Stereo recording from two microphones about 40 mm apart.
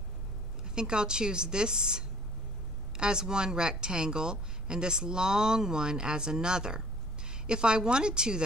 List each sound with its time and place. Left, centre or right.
0.7 s a woman's voice: right